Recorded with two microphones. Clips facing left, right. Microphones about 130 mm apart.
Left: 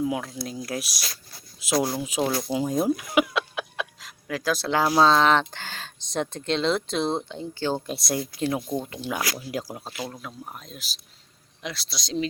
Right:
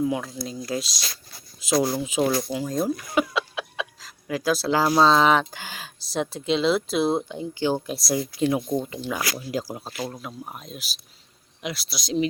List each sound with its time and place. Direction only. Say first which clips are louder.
0.0 s speech: right 2 dB; centre (ahead or behind)
0.8 s speech: right 3 dB; 70° left (ahead or behind)
1.6 s speech: right 2 dB; 5° left (ahead or behind)
2.6 s speech: left 2 dB; 10° left (ahead or behind); by 7.8 s 15° right (ahead or behind)
7.9 s speech: right 2 dB; centre (ahead or behind)